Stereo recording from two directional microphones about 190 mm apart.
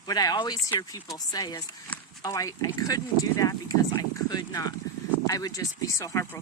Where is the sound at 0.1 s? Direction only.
20° left (ahead or behind).